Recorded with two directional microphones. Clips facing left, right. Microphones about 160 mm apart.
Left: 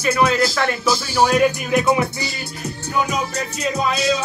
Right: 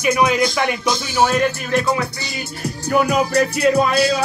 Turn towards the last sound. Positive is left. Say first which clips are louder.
# right 6 dB
turn(degrees=-65)  # may be behind; listen again after turning